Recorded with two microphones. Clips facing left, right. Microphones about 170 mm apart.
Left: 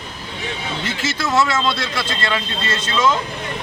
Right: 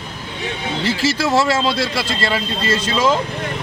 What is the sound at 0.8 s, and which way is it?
Speech, 35° right (ahead or behind).